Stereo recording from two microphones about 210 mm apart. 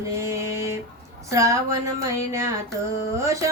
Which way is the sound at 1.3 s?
15° right (ahead or behind).